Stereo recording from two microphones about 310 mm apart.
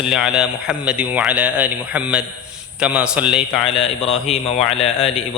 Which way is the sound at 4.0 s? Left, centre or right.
Left.